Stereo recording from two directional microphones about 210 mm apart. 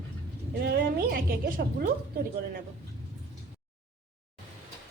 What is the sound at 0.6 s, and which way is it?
A woman's voice, 45° right (ahead or behind).